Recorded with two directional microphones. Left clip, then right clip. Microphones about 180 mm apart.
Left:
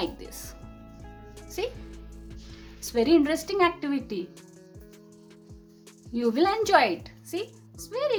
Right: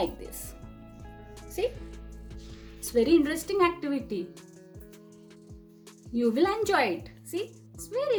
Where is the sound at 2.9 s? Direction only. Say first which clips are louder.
Left 1 dB; 25° left (ahead or behind).